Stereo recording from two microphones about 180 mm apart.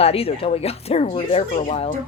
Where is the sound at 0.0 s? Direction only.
35° left (ahead or behind).